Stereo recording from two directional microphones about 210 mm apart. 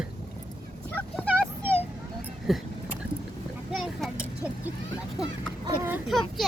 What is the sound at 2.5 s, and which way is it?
Speech, centre (ahead or behind).